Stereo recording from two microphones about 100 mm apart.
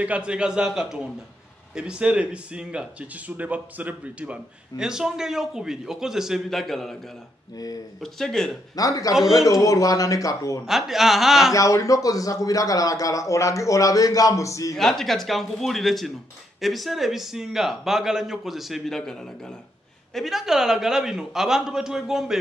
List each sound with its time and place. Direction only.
0.0 s speech: 10° right (ahead or behind)
7.5 s a man's voice: 40° left (ahead or behind)
8.0 s a man's voice: 5° left (ahead or behind)
8.7 s a man's voice: 35° left (ahead or behind)
10.6 s a man's voice: 5° right (ahead or behind)
11.5 s a man's voice: 30° left (ahead or behind)
14.8 s a man's voice: 5° left (ahead or behind)